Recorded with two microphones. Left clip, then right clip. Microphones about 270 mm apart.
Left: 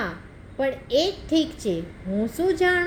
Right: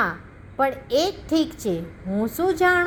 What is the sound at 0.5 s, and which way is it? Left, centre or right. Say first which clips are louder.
A woman's voice: right 2 dB; centre.